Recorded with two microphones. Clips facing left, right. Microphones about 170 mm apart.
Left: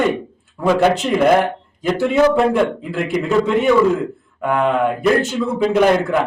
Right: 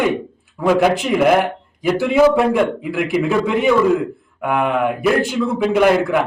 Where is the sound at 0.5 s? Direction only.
5° right (ahead or behind).